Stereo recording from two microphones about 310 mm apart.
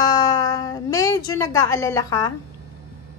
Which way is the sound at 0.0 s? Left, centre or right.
Centre.